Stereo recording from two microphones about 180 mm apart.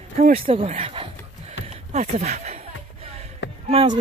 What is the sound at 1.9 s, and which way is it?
Speech, 40° right (ahead or behind).